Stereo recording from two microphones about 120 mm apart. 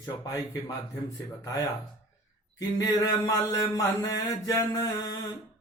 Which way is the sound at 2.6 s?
30° left (ahead or behind).